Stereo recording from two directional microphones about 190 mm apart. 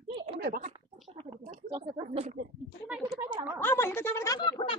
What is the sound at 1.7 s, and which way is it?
Speech, 30° right (ahead or behind).